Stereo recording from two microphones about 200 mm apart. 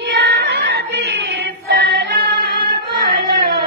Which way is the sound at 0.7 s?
55° right (ahead or behind).